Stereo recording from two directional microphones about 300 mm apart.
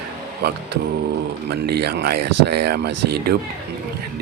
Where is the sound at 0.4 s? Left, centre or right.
Right.